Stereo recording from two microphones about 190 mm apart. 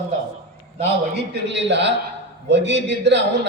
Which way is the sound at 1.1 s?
65° right (ahead or behind).